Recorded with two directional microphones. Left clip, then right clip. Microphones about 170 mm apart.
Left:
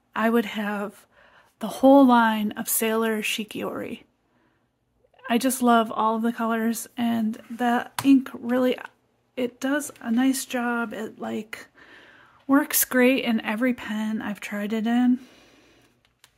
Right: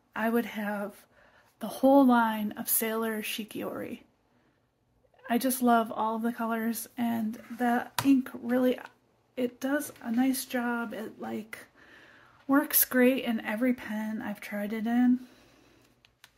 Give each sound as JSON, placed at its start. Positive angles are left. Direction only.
{"t": 0.1, "sound": "a woman's voice", "side_deg": 40}
{"t": 5.2, "sound": "speech", "side_deg": 40}